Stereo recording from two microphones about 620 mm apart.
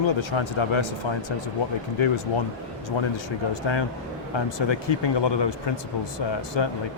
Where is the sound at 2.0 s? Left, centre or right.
Left.